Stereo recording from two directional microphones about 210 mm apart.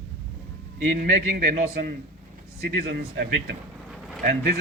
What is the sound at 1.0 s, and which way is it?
Speech, 45° right (ahead or behind).